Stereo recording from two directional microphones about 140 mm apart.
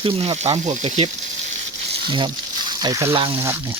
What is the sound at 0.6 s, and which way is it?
Speech, 60° right (ahead or behind).